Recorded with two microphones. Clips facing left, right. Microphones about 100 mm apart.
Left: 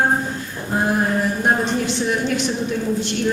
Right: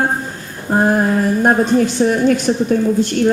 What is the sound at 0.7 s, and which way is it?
A woman's voice, 45° right (ahead or behind).